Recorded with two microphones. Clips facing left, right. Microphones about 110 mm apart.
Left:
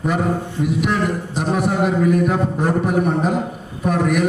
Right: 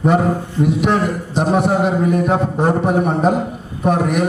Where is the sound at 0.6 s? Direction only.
25° right (ahead or behind).